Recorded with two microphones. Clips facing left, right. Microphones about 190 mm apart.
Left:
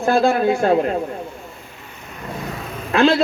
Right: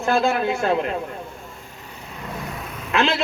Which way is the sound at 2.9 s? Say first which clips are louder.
Left 6 dB; 35° left (ahead or behind).